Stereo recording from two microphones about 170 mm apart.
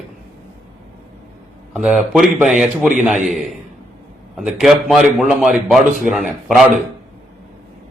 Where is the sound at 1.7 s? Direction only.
Centre (ahead or behind).